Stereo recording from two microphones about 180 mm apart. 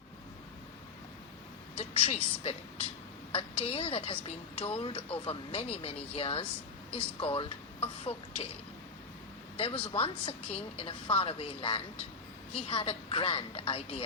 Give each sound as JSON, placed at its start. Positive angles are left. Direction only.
{"t": 1.8, "sound": "a woman's voice", "side_deg": 35}
{"t": 9.6, "sound": "a woman's voice", "side_deg": 30}